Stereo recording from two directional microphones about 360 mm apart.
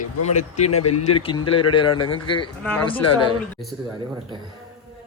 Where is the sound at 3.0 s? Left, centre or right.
Left.